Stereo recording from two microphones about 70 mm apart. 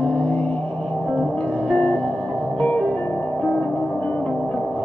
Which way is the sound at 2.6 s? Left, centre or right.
Left.